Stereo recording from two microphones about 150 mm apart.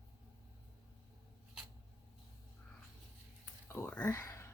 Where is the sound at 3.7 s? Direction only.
15° left (ahead or behind).